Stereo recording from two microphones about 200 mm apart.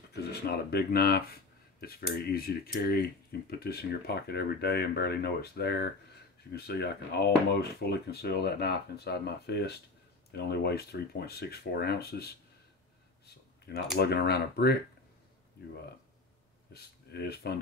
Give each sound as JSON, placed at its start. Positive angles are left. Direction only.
{"t": 0.1, "sound": "speech", "side_deg": 55}
{"t": 13.9, "sound": "speech", "side_deg": 50}
{"t": 16.7, "sound": "speech", "side_deg": 50}